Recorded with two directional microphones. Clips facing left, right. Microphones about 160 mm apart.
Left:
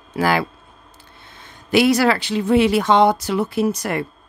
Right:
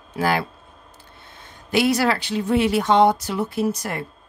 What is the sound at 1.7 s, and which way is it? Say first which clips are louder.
Speech: left 4 dB; 90° left.